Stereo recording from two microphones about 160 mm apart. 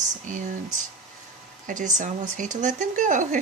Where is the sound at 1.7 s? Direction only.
50° right (ahead or behind).